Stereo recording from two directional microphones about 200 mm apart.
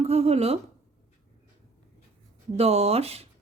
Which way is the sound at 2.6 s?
30° right (ahead or behind).